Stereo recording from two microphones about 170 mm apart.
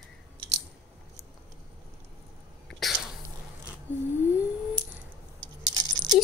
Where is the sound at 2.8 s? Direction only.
Centre (ahead or behind).